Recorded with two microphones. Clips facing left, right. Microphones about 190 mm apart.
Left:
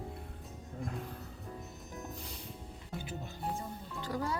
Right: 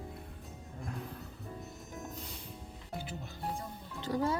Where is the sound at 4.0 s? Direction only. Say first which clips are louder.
Right 4 dB; 25° right (ahead or behind).